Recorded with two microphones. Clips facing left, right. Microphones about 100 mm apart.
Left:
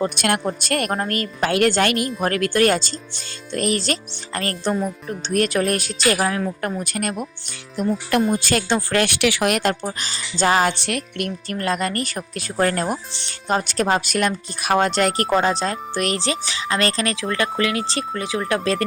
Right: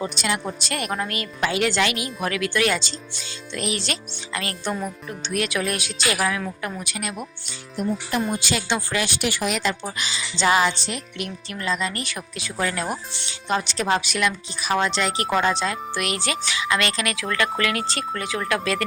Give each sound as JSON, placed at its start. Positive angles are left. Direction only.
{"t": 0.0, "sound": "speech", "side_deg": 55}
{"t": 8.4, "sound": "speech", "side_deg": 45}
{"t": 10.0, "sound": "speech", "side_deg": 45}